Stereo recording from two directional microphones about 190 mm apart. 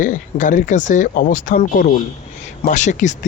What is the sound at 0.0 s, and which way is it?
Speech, 40° left (ahead or behind).